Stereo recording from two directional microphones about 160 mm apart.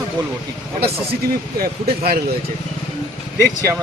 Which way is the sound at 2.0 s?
75° right (ahead or behind).